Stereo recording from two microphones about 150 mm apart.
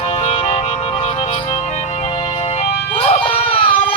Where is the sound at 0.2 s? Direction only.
45° left (ahead or behind).